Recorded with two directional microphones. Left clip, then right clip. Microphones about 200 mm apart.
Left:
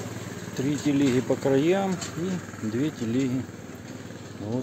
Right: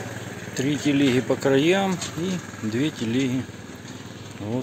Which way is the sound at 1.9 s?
50° left (ahead or behind).